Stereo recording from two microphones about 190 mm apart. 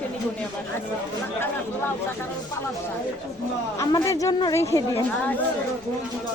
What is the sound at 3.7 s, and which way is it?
A woman's voice, 20° left (ahead or behind).